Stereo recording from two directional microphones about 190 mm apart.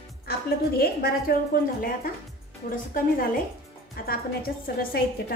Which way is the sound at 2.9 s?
50° left (ahead or behind).